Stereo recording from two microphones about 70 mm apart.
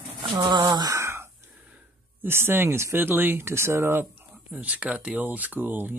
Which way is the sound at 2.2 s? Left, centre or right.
Right.